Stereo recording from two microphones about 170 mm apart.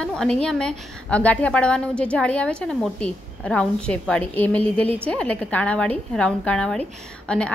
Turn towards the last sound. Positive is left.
turn(degrees=5)  # may be behind; listen again after turning